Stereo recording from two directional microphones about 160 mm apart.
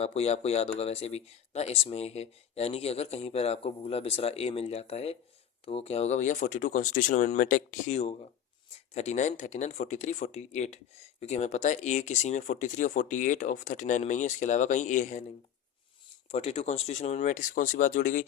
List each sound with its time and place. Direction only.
0.0 s speech: 40° left (ahead or behind); by 7.9 s 60° left (ahead or behind)
7.9 s speech: 45° left (ahead or behind)
16.3 s speech: 40° left (ahead or behind); by 18.3 s 55° left (ahead or behind)